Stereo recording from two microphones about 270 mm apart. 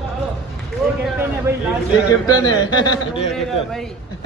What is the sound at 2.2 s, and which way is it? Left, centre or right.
Speech, centre.